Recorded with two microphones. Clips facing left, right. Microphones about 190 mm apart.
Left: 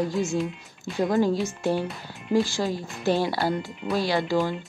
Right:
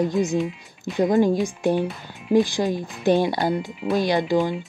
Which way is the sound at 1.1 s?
15° right (ahead or behind).